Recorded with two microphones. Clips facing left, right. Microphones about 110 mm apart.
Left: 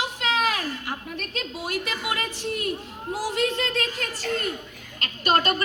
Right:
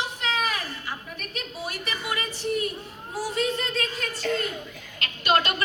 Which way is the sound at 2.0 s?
80° left.